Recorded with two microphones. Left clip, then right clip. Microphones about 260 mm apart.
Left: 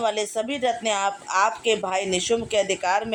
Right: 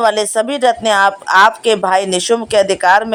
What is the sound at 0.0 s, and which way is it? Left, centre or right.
Speech, right.